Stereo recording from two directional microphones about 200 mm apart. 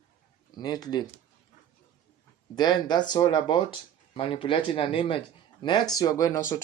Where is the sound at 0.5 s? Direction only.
20° left (ahead or behind).